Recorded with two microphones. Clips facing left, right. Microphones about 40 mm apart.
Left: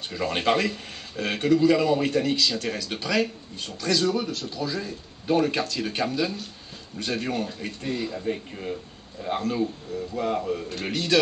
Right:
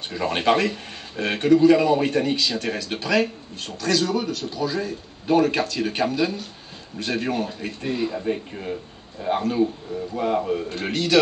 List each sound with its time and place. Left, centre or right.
0.1 s speech: centre
1.2 s speech: right